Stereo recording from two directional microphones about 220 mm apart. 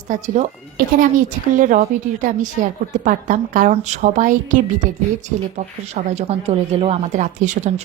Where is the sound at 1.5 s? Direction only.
35° right (ahead or behind).